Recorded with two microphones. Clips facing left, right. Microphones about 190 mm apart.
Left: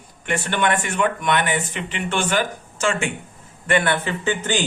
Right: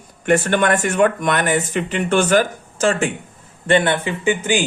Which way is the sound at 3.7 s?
20° right (ahead or behind).